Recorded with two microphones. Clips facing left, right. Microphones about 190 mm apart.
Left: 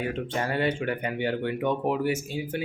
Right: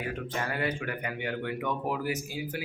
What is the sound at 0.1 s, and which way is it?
Speech, 30° left (ahead or behind).